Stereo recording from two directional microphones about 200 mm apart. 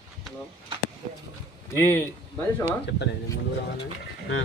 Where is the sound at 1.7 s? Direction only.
10° left (ahead or behind).